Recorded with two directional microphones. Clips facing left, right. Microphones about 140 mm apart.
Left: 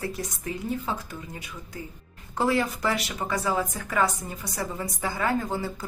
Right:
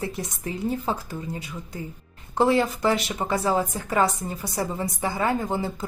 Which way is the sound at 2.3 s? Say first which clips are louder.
Right 4 dB; 25° right (ahead or behind).